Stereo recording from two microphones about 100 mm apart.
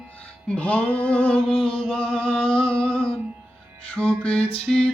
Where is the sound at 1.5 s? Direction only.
65° left (ahead or behind).